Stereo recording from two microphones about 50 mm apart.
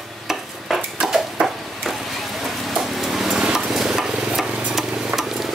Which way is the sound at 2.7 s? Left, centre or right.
Centre.